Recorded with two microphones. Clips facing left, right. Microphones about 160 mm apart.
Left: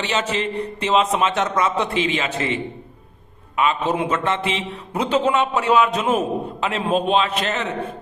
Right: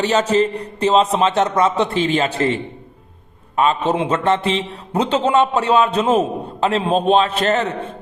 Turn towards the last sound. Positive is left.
turn(degrees=-40)  # may be behind; listen again after turning